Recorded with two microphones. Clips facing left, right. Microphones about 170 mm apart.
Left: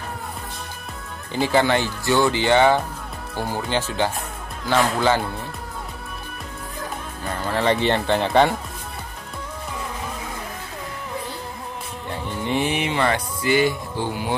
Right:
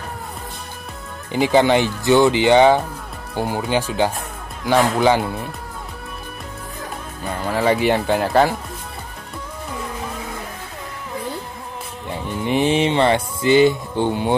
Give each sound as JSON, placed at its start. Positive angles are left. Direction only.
{"t": 1.3, "sound": "speech", "side_deg": -15}
{"t": 7.2, "sound": "speech", "side_deg": -10}
{"t": 12.1, "sound": "music", "side_deg": -20}